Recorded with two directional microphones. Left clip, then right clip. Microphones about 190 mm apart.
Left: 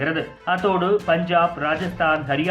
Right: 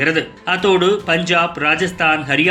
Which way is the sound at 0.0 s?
20° right (ahead or behind).